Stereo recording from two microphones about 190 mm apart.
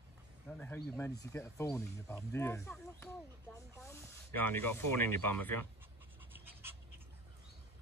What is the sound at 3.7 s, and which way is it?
Speech, 15° left (ahead or behind).